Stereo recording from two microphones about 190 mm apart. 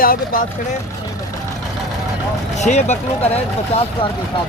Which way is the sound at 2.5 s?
35° left (ahead or behind).